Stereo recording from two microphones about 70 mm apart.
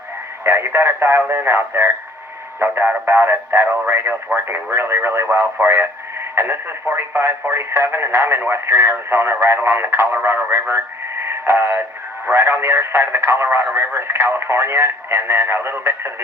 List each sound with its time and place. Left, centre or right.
0.4 s speech: right
11.3 s radio: right
12.3 s speech: right